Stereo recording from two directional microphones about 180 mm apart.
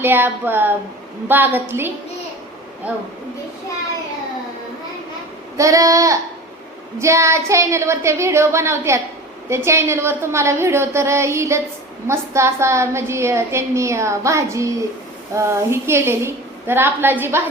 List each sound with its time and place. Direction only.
0.0 s a woman's voice: 10° right (ahead or behind)
5.5 s a woman's voice: 20° right (ahead or behind)